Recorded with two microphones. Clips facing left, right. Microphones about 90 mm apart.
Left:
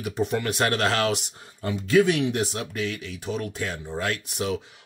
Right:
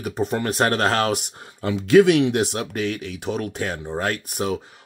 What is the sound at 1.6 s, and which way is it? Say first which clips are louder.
Speech: right 6 dB; 75° right (ahead or behind).